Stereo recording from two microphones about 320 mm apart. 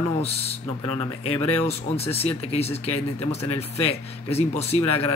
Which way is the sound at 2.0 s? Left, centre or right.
Centre.